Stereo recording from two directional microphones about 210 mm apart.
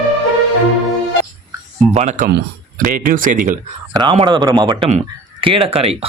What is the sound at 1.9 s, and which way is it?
Speech, 35° right (ahead or behind).